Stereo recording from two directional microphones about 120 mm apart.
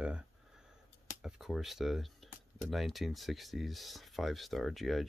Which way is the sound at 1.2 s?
Centre (ahead or behind).